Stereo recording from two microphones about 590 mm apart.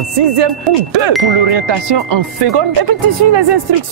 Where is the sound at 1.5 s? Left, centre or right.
Right.